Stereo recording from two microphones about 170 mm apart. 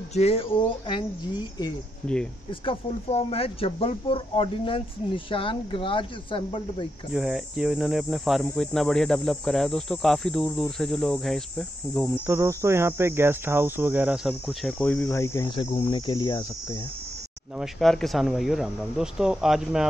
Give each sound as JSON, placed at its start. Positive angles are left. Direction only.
{"t": 0.1, "sound": "speech", "side_deg": 35}
{"t": 2.6, "sound": "speech", "side_deg": 35}
{"t": 7.2, "sound": "speech", "side_deg": -5}
{"t": 12.3, "sound": "cricket", "side_deg": -15}
{"t": 15.5, "sound": "cricket", "side_deg": 30}
{"t": 17.6, "sound": "speech", "side_deg": 0}